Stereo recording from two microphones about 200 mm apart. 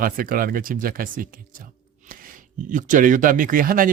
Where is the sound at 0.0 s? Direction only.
45° right (ahead or behind).